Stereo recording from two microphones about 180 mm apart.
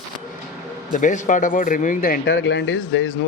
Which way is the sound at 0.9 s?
45° left (ahead or behind).